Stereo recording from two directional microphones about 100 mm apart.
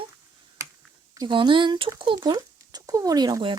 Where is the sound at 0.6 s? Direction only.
30° right (ahead or behind).